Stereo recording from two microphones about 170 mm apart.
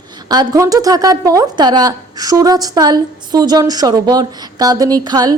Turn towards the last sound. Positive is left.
turn(degrees=-20)  # may be behind; listen again after turning